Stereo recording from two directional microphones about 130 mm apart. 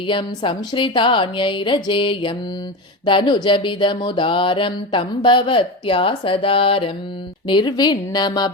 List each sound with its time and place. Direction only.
0.1 s mantra: 40° left (ahead or behind)